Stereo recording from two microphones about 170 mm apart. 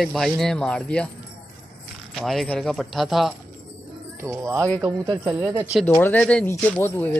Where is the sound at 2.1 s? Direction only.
Centre (ahead or behind).